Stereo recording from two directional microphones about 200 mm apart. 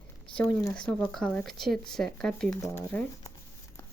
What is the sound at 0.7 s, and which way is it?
Speech, 5° left (ahead or behind).